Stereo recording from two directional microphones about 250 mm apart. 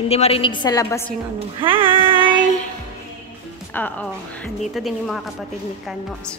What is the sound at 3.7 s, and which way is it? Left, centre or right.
A woman's voice, centre.